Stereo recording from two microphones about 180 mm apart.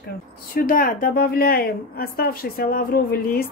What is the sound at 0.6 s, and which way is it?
A woman's voice, 50° left (ahead or behind).